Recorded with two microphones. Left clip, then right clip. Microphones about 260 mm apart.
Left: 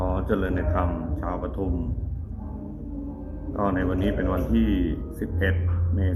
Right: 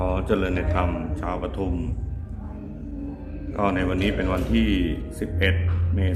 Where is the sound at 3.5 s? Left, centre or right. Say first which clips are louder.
Right 2 dB; centre.